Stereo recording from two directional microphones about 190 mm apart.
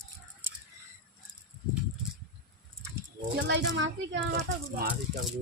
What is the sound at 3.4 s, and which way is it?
Speech, 65° right (ahead or behind).